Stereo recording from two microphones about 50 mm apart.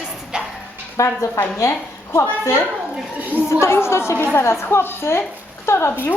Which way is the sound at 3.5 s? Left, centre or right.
Left.